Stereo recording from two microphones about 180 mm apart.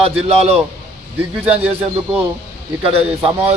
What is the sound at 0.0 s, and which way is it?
A man's voice, 35° right (ahead or behind).